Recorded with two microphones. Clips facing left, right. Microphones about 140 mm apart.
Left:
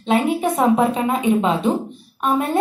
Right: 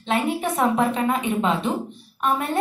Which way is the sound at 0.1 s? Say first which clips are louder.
Left 5 dB; 20° left (ahead or behind).